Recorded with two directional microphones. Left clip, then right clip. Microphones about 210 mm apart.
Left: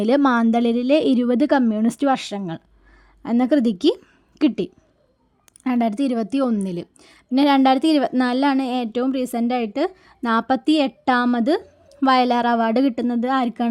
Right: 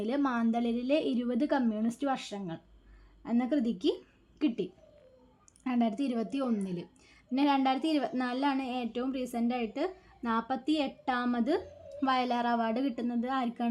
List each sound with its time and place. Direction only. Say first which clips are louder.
0.0 s a woman's voice: left 14 dB; 50° left (ahead or behind)